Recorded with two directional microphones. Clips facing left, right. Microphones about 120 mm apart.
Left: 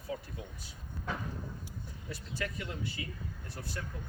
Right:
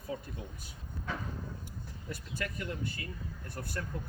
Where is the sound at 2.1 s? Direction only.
50° right (ahead or behind).